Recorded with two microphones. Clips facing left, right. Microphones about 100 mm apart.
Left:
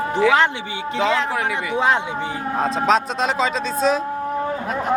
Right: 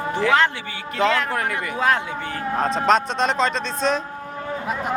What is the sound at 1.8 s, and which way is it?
Speech, 20° left (ahead or behind).